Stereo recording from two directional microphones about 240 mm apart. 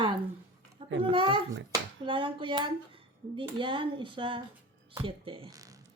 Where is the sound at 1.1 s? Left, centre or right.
Right.